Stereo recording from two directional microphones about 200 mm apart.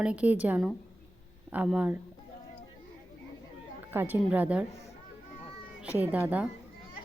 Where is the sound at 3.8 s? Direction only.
10° right (ahead or behind).